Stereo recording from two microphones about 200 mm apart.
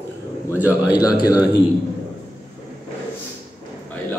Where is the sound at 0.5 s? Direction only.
10° right (ahead or behind).